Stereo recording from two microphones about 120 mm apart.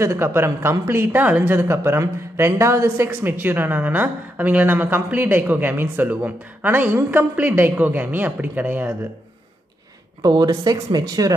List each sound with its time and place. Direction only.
0.0 s a woman's voice: 20° right (ahead or behind)
10.2 s speech: 35° right (ahead or behind)